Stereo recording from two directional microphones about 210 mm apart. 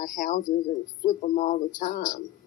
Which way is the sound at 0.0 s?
40° left (ahead or behind).